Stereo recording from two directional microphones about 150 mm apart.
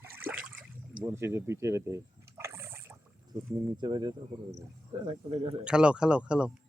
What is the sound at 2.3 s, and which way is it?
Water, 20° right (ahead or behind).